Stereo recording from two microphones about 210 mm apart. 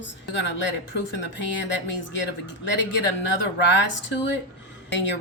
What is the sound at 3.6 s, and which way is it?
Speech, 55° left (ahead or behind).